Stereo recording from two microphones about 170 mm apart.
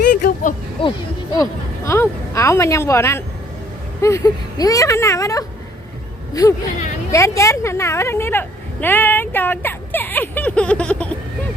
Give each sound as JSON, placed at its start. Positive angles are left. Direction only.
{"t": 0.1, "sound": "a sound", "side_deg": 60}
{"t": 0.8, "sound": "speech", "side_deg": 30}
{"t": 1.4, "sound": "speech", "side_deg": 15}